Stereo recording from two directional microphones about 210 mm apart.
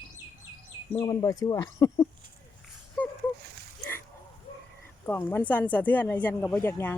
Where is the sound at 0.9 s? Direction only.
20° left (ahead or behind).